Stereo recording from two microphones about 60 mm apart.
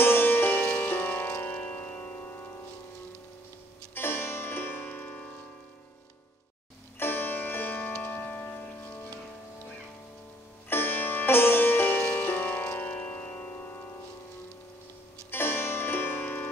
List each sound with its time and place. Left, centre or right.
0.0 s music: left
3.9 s music: left
7.0 s music: left
10.7 s sitar: left
15.3 s music: left